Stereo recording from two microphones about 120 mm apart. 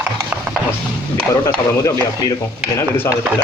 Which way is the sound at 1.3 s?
25° left (ahead or behind).